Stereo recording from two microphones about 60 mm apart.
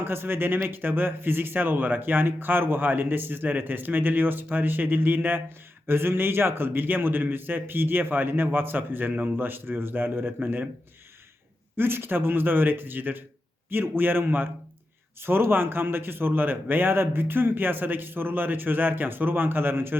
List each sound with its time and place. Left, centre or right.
0.0 s a man's voice: right
9.1 s a man's voice: right
9.4 s a man's voice: right
11.8 s a man's voice: right